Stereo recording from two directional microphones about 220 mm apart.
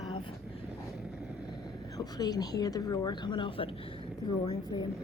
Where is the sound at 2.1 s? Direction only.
15° left (ahead or behind).